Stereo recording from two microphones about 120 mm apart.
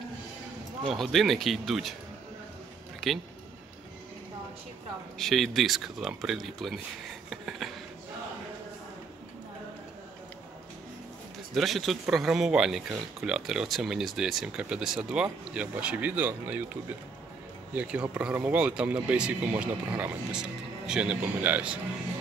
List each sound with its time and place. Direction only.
0.8 s speech: centre (ahead or behind)
5.2 s speech: centre (ahead or behind)
11.5 s speech: centre (ahead or behind)
17.7 s speech: 10° right (ahead or behind)